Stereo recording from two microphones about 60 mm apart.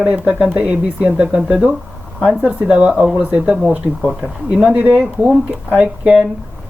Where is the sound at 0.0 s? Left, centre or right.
Centre.